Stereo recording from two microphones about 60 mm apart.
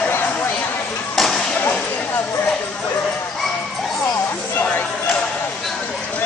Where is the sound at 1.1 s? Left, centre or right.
Centre.